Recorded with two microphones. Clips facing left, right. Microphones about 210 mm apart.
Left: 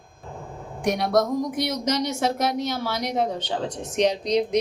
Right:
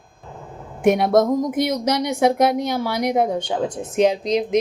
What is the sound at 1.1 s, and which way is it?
Speech, 50° right (ahead or behind).